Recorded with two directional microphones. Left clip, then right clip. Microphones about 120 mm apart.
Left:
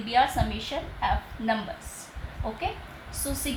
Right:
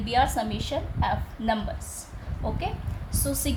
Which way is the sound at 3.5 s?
90° right.